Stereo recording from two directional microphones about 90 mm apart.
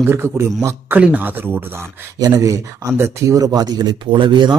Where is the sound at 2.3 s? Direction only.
40° right (ahead or behind); by 4.6 s 55° right (ahead or behind).